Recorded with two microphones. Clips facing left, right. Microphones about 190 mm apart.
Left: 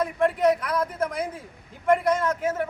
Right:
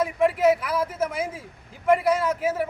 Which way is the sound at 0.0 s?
5° right (ahead or behind).